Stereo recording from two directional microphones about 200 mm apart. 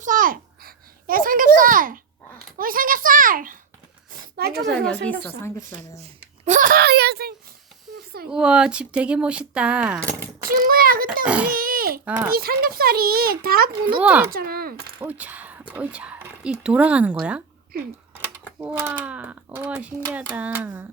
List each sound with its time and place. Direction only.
0.0 s a sound: 40° right (ahead or behind)
4.4 s speech: 50° right (ahead or behind)
4.7 s a woman's voice: centre (ahead or behind)
6.0 s speech: 35° right (ahead or behind); by 7.3 s 50° right (ahead or behind)
8.3 s speech: 5° right (ahead or behind)
10.2 s a child's voice: 45° right (ahead or behind)
11.3 s speech: 5° right (ahead or behind)
11.5 s crying: 45° right (ahead or behind)
12.0 s speech: 10° right (ahead or behind)
12.3 s speech: 50° right (ahead or behind)
14.0 s speech: 10° right (ahead or behind)
14.3 s speech: 45° right (ahead or behind)
15.0 s speech: 10° right (ahead or behind)
18.6 s speech: 10° right (ahead or behind)